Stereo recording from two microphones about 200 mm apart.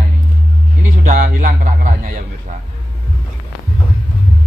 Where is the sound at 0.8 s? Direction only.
40° right (ahead or behind).